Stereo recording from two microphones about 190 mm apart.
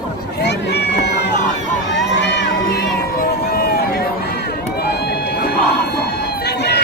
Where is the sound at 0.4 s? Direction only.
60° left (ahead or behind).